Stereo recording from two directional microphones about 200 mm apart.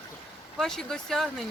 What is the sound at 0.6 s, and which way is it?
Speech, 5° left (ahead or behind).